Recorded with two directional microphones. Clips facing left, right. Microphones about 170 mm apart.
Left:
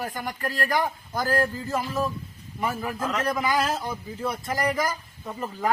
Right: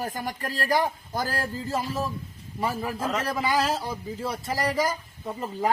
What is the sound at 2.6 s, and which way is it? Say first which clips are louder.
A man's voice: even; 30° right (ahead or behind).